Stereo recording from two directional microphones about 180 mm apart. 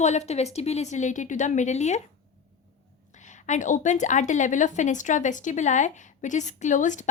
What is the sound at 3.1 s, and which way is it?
A woman's voice, 40° left (ahead or behind).